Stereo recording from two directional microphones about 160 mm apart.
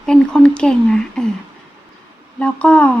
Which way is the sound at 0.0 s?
5° left (ahead or behind).